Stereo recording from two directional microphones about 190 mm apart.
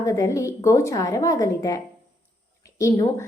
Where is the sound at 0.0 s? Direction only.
15° left (ahead or behind).